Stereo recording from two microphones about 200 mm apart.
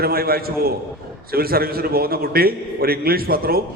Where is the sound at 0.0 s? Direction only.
50° right (ahead or behind).